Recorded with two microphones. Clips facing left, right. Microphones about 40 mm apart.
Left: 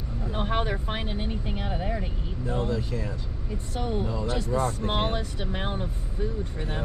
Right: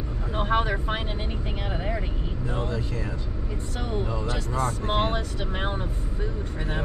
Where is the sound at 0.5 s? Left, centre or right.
Centre.